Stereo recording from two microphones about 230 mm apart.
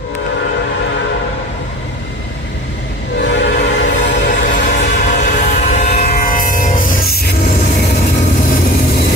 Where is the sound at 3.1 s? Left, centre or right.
Left.